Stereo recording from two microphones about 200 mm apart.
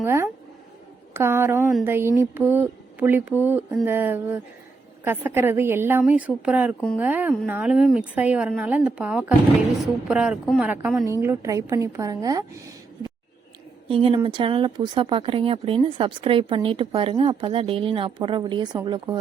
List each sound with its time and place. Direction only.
0.0 s a woman's voice: 15° right (ahead or behind)